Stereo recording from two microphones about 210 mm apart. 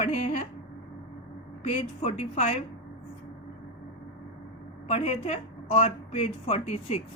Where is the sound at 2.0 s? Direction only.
30° left (ahead or behind).